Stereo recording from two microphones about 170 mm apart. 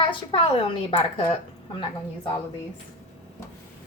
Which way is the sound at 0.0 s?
30° left (ahead or behind).